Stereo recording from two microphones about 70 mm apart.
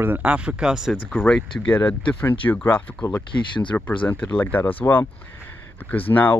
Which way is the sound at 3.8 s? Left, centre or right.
Left.